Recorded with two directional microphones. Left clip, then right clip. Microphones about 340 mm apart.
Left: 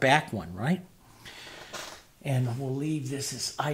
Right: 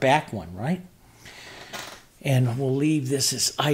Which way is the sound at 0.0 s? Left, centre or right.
Centre.